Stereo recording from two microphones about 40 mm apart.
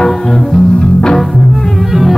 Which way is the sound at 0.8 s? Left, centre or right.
Left.